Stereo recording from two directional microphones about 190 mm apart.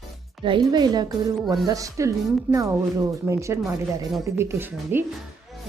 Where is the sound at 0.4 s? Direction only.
25° right (ahead or behind).